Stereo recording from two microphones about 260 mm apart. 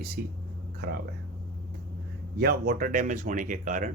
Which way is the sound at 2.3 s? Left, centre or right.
Right.